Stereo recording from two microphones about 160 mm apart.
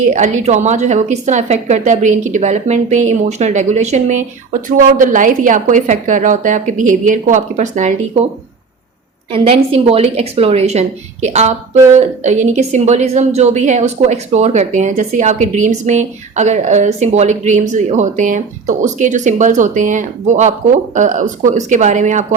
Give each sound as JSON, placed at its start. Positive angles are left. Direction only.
{"t": 0.0, "sound": "speech", "side_deg": -50}
{"t": 9.3, "sound": "speech", "side_deg": -35}